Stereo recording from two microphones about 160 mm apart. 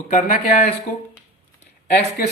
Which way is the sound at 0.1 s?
55° left (ahead or behind).